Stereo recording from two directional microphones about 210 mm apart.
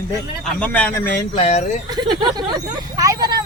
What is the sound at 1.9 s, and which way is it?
Speech, 20° right (ahead or behind).